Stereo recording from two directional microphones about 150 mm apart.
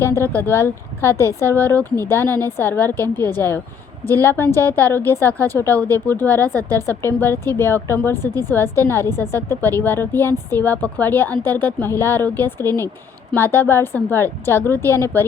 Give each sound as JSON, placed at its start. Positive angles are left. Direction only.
{"t": 0.3, "sound": "a woman's voice", "side_deg": 15}